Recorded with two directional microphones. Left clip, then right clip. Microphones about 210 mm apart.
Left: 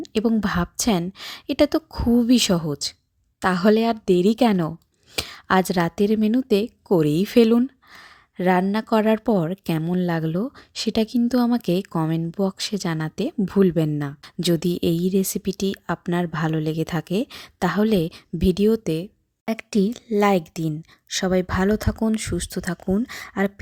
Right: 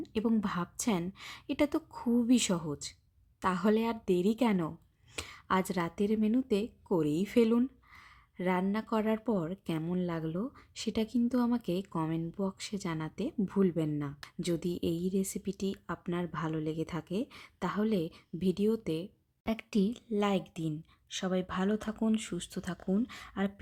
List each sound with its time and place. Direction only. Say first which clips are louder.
0.0 s speech: left 10 dB; 35° left (ahead or behind)